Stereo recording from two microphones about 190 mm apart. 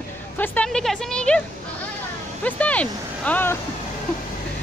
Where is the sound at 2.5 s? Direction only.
5° left (ahead or behind).